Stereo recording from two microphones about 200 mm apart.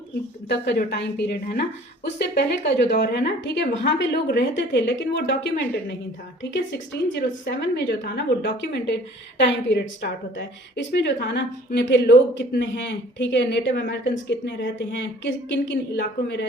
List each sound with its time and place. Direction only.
0.4 s a woman's voice: 55° left (ahead or behind)
6.7 s a woman's voice: 60° left (ahead or behind)